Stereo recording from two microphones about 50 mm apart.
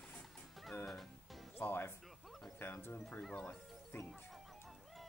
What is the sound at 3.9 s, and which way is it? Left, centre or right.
Speech, left.